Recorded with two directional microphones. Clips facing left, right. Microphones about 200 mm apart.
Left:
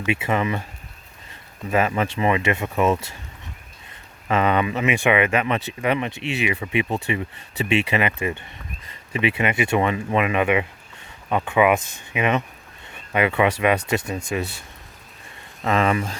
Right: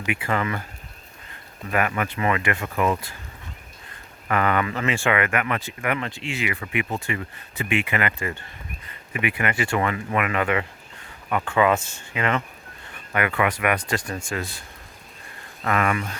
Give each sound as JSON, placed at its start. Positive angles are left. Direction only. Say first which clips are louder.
{"t": 0.0, "sound": "speech", "louder": "left 3 dB", "side_deg": 25}
{"t": 1.7, "sound": "speech", "louder": "left 3 dB", "side_deg": 25}
{"t": 4.3, "sound": "speech", "louder": "left 2 dB", "side_deg": 20}
{"t": 15.6, "sound": "speech", "louder": "left 3 dB", "side_deg": 25}